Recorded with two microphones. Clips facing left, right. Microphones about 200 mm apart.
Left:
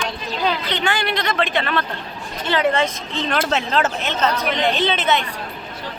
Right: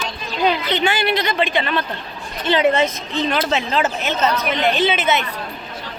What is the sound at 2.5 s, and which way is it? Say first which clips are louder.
Speech: right 3 dB; 20° right (ahead or behind).